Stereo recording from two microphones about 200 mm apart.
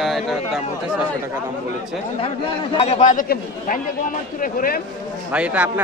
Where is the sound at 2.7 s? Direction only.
35° left (ahead or behind).